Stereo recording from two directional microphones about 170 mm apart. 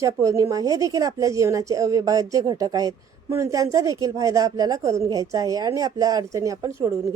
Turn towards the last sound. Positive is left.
turn(degrees=-20)  # may be behind; listen again after turning